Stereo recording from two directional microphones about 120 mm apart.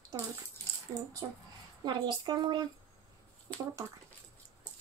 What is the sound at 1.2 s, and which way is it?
A woman's voice, 35° right (ahead or behind).